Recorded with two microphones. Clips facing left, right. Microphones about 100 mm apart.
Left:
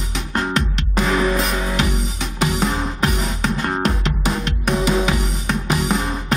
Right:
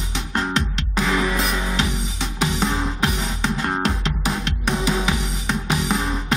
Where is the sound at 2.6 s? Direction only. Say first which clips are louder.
Left 2 dB; 5° left (ahead or behind).